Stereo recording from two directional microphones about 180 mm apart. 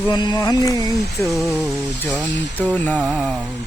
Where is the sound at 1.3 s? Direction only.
Centre (ahead or behind).